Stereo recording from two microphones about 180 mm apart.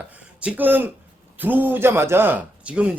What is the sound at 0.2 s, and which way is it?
A man's voice, 5° right (ahead or behind).